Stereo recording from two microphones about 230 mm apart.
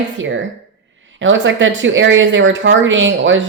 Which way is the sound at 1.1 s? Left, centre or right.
Right.